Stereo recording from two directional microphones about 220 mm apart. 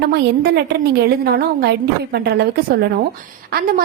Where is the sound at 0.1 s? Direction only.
45° right (ahead or behind).